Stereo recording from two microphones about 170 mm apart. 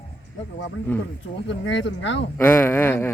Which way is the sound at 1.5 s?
90° left.